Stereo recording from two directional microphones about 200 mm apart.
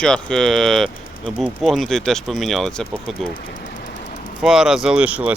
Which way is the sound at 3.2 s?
45° left (ahead or behind).